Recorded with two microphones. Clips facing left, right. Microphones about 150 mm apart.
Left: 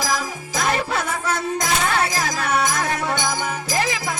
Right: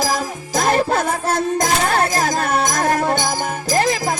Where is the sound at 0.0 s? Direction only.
40° right (ahead or behind).